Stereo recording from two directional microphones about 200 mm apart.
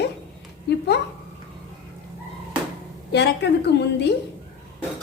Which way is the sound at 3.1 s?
55° left (ahead or behind).